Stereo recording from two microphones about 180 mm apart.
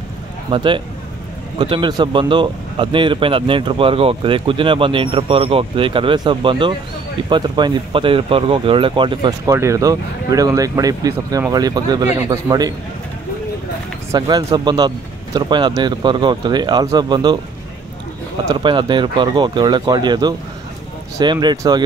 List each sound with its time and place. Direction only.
0.5 s speech: 25° right (ahead or behind)
14.1 s speech: 20° right (ahead or behind)
18.4 s speech: 25° right (ahead or behind)